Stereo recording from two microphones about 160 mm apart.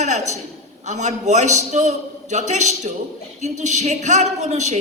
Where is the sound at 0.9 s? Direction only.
45° right (ahead or behind).